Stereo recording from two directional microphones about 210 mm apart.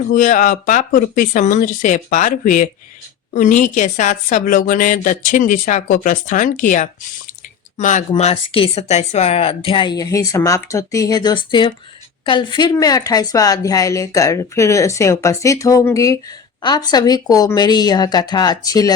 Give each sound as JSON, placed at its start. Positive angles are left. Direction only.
{"t": 0.0, "sound": "a woman's voice", "side_deg": 35}